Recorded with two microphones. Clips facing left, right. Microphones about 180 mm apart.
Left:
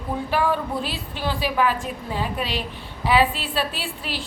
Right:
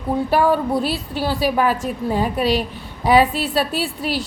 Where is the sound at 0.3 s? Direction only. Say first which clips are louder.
Right 5 dB; 40° right (ahead or behind).